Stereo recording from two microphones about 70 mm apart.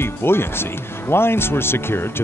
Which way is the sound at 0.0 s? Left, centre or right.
Left.